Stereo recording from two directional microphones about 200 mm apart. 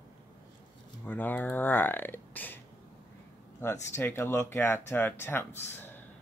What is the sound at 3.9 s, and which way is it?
Speech, 10° left (ahead or behind).